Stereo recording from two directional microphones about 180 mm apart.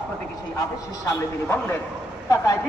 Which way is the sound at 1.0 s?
10° left (ahead or behind).